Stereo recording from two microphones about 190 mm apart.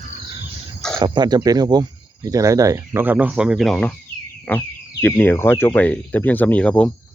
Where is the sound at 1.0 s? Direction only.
20° right (ahead or behind); by 6.8 s 5° left (ahead or behind).